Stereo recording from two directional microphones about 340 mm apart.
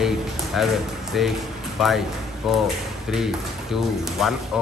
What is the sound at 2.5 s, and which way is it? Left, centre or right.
Speech, centre.